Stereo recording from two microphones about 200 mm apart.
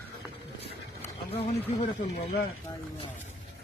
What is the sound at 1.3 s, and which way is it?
Speech, 30° left (ahead or behind).